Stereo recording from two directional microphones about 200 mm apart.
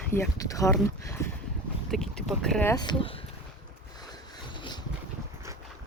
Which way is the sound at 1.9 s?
Centre (ahead or behind).